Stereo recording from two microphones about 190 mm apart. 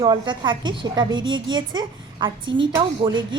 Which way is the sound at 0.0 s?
25° right (ahead or behind).